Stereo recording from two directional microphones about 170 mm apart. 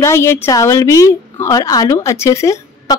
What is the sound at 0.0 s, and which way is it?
A woman's voice, 15° left (ahead or behind).